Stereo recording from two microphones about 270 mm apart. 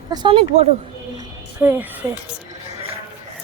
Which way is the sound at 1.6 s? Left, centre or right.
Centre.